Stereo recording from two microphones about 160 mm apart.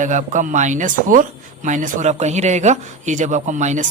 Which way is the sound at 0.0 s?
50° right (ahead or behind).